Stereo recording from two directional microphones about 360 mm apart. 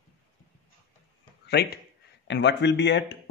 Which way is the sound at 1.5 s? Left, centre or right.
Left.